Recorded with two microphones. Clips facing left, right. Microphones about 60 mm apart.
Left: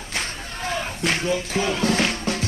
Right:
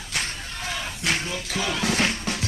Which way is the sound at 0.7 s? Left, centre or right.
Left.